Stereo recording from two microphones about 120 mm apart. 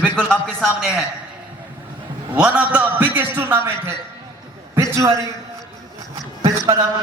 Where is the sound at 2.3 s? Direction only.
10° right (ahead or behind); by 5.3 s 25° right (ahead or behind).